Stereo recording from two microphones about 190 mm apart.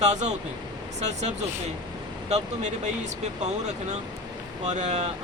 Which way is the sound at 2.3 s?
40° right (ahead or behind).